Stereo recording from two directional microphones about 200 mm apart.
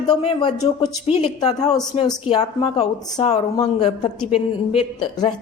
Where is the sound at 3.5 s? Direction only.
20° left (ahead or behind).